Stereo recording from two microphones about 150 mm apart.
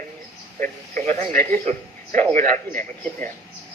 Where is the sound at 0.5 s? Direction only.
60° right (ahead or behind).